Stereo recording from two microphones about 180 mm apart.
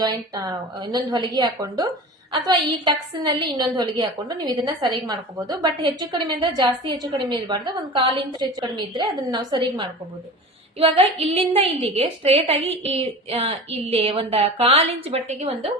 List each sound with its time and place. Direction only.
0.0 s a woman's voice: 20° right (ahead or behind)